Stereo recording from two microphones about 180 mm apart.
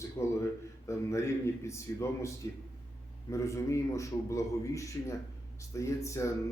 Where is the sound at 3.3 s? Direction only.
15° left (ahead or behind).